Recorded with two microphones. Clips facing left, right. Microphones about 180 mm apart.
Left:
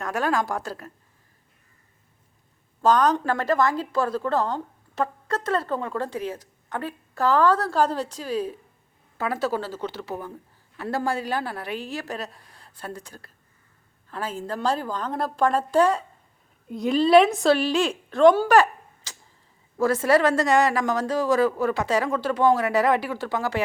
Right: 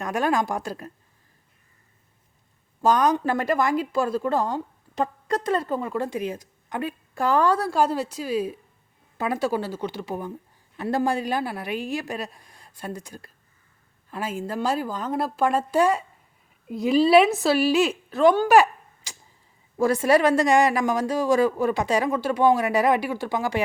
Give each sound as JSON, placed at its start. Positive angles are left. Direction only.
{"t": 0.0, "sound": "a woman's voice", "side_deg": -15}
{"t": 2.8, "sound": "a woman's voice", "side_deg": -10}
{"t": 18.4, "sound": "a sound", "side_deg": -10}
{"t": 19.7, "sound": "a woman's voice", "side_deg": -15}